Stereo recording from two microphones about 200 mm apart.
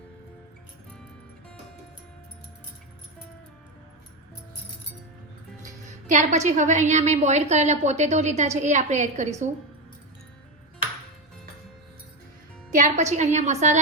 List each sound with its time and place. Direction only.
5.6 s a woman's voice: 40° right (ahead or behind)
12.7 s a woman's voice: 35° right (ahead or behind)